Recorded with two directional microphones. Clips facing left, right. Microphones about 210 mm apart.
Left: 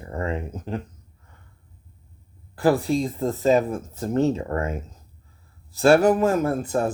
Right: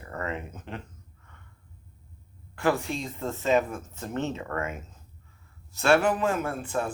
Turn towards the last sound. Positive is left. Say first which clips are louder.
# left 7 dB
turn(degrees=40)  # may be behind; listen again after turning